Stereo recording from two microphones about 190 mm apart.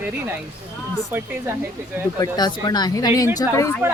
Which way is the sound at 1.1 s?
10° right (ahead or behind).